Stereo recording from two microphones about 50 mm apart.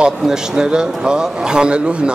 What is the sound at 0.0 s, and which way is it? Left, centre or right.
A man's voice, centre.